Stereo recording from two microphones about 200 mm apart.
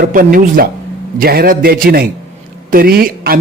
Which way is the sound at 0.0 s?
45° right (ahead or behind).